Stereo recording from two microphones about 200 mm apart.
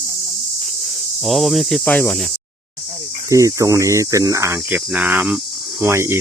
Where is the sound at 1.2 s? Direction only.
Centre (ahead or behind).